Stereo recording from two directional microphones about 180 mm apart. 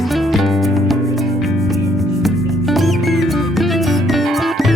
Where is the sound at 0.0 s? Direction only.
Centre (ahead or behind).